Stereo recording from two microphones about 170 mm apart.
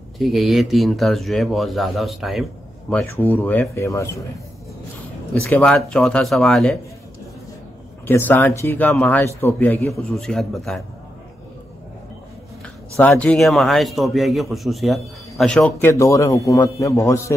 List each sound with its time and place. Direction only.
0.2 s a man's voice: centre (ahead or behind)
2.9 s a man's voice: 10° left (ahead or behind)
5.3 s a man's voice: 10° left (ahead or behind)
8.1 s a man's voice: 10° left (ahead or behind)
12.9 s a man's voice: 10° left (ahead or behind)
15.9 s a man's voice: 15° left (ahead or behind)